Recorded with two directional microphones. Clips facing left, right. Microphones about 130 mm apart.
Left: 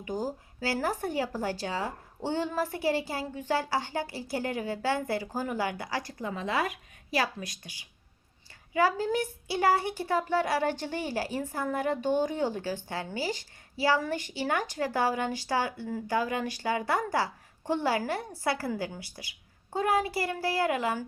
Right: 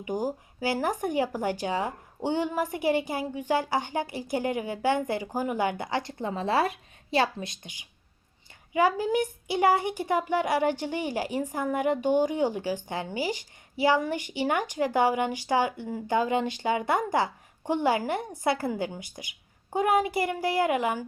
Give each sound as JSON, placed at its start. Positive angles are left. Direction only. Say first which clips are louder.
{"t": 0.0, "sound": "a woman's voice", "louder": "right 3 dB", "side_deg": -15}